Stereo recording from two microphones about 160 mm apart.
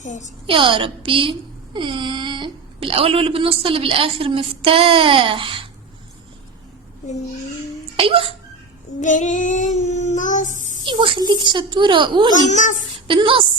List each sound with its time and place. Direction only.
0.0 s a child's voice: 50° left (ahead or behind)
0.4 s a child's voice: 35° right (ahead or behind)
7.9 s speech: 35° right (ahead or behind)
9.0 s child singing: 50° left (ahead or behind)
10.8 s a woman's voice: 30° right (ahead or behind)
12.5 s a child's voice: 50° left (ahead or behind)
13.1 s speech: 35° right (ahead or behind)